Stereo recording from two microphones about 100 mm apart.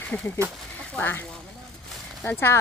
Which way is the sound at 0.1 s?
20° left (ahead or behind).